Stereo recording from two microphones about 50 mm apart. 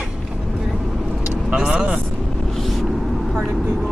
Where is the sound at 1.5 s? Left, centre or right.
Centre.